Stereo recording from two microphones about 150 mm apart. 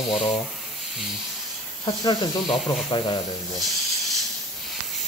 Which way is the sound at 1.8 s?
30° left (ahead or behind).